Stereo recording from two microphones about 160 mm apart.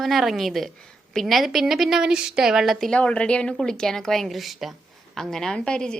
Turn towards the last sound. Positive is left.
turn(degrees=5)  # may be behind; listen again after turning